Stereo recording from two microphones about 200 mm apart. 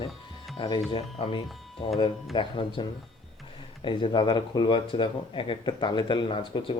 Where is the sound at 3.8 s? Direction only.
25° left (ahead or behind).